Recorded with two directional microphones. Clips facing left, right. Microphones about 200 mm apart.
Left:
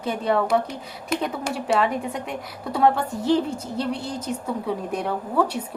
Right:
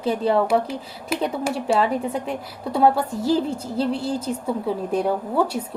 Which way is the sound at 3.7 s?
30° right (ahead or behind).